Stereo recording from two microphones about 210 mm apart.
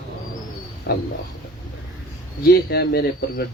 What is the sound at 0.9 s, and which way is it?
Speech, 50° left (ahead or behind).